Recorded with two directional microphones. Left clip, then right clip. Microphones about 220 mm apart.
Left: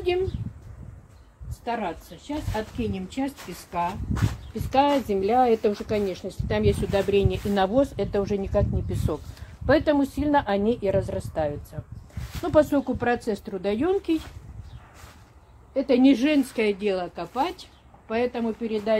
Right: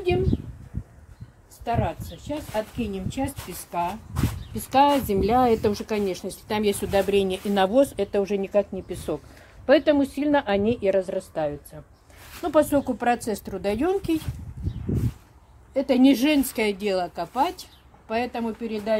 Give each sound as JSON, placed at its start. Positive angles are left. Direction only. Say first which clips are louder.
{"t": 1.7, "sound": "a woman's voice", "louder": "right 2 dB", "side_deg": -25}
{"t": 4.6, "sound": "a woman's voice", "louder": "right 2 dB", "side_deg": -45}
{"t": 15.7, "sound": "a woman's voice", "louder": "even", "side_deg": -35}